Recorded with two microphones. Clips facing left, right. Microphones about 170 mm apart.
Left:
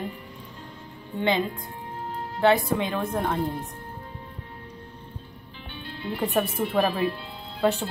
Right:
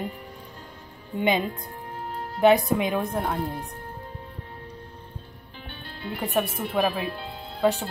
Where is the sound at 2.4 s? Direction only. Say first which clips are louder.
Right 2 dB; 15° right (ahead or behind).